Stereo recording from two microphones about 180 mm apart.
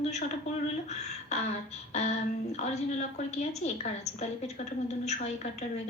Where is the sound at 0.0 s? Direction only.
40° left (ahead or behind).